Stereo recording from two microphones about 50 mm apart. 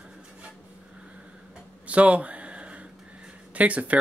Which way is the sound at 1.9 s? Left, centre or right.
Right.